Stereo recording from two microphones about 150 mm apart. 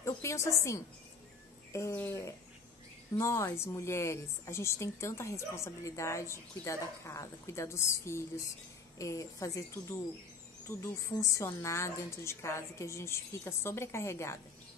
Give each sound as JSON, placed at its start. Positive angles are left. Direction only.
{"t": 0.0, "sound": "a woman's voice", "side_deg": 20}